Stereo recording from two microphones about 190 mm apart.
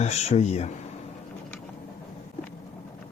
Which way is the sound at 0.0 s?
35° left (ahead or behind).